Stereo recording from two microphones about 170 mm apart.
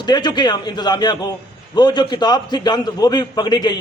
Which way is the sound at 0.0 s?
25° left (ahead or behind).